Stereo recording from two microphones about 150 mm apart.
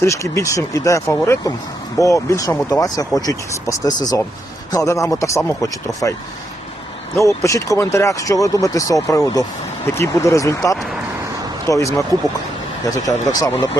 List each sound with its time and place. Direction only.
0.0 s speech: 20° left (ahead or behind)
7.2 s speech: 20° left (ahead or behind)